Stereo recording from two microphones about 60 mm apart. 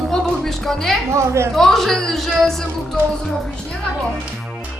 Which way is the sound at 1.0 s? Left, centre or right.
Right.